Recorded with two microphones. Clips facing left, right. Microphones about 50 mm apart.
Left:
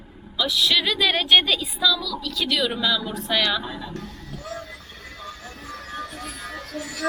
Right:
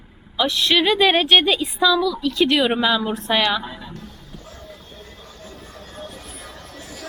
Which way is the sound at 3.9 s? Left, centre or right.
Left.